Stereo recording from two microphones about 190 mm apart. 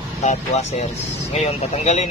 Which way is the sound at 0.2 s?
35° left (ahead or behind).